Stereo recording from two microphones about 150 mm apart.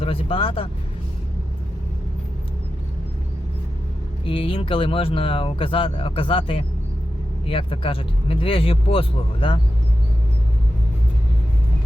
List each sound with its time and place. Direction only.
0.0 s speech: 40° left (ahead or behind)
4.3 s speech: 35° left (ahead or behind)